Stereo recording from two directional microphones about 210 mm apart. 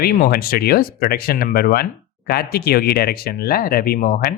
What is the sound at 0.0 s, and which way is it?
Speech, 45° left (ahead or behind).